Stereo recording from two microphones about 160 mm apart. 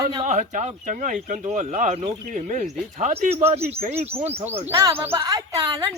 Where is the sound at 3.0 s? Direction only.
40° right (ahead or behind).